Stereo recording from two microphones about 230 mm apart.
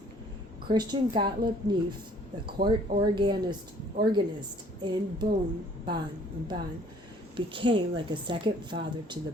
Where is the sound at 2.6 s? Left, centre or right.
Right.